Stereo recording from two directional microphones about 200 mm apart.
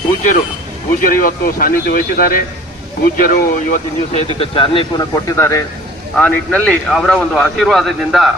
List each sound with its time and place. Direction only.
1.0 s speech: 45° left (ahead or behind)
4.4 s a man's voice: 25° left (ahead or behind); by 8.3 s centre (ahead or behind)